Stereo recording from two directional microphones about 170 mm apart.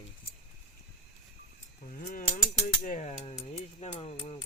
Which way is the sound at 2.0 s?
50° left (ahead or behind).